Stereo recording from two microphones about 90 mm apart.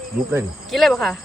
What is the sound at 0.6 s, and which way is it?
Speech, centre (ahead or behind).